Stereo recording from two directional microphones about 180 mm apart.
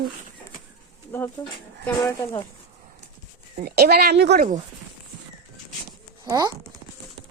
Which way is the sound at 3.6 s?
55° right (ahead or behind).